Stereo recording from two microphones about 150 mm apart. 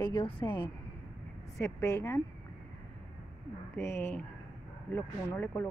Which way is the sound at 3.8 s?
15° left (ahead or behind).